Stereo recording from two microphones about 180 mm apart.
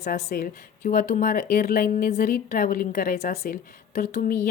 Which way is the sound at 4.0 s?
45° left (ahead or behind).